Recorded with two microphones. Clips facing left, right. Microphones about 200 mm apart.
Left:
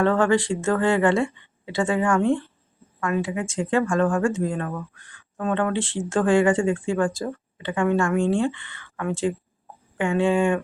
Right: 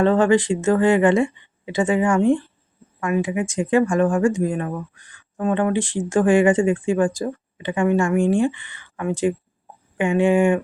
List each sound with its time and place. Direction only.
0.0 s speech: 20° right (ahead or behind)